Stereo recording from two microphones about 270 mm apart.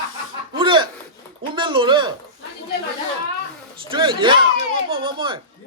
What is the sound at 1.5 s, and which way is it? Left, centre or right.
Speech, centre.